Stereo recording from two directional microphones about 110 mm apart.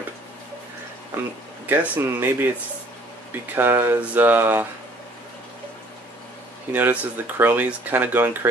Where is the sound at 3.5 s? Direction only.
15° right (ahead or behind).